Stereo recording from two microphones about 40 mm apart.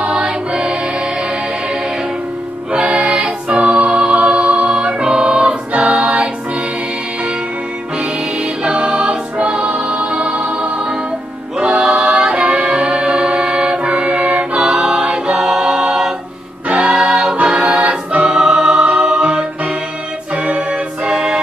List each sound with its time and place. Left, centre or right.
0.0 s music: right
2.7 s music: right
8.0 s music: right
11.5 s singing: centre
14.6 s choir: centre
16.6 s choir: right
18.3 s music: centre
20.3 s music: right